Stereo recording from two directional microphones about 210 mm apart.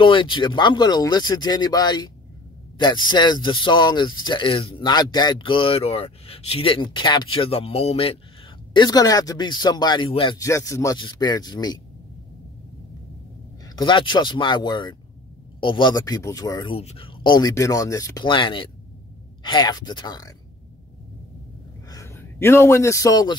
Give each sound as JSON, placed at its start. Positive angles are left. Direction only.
{"t": 0.0, "sound": "speech", "side_deg": 25}
{"t": 13.7, "sound": "speech", "side_deg": 20}
{"t": 21.8, "sound": "a man's voice", "side_deg": 15}